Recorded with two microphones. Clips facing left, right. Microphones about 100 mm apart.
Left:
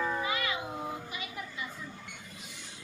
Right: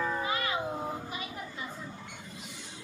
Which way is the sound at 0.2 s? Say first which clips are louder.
Right 1 dB; 35° right (ahead or behind).